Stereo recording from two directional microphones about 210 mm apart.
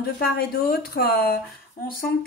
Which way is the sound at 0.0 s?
45° left (ahead or behind).